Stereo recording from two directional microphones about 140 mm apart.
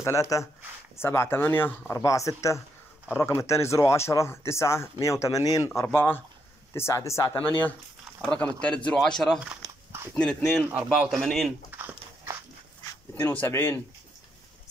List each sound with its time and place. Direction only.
0.0 s speech: 20° left (ahead or behind)
5.8 s speech: 15° left (ahead or behind)
10.7 s a man's voice: 5° right (ahead or behind)
11.7 s a sound: 15° right (ahead or behind)
13.1 s speech: 10° left (ahead or behind)